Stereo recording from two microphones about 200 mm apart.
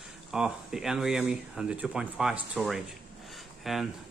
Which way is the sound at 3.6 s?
Centre (ahead or behind).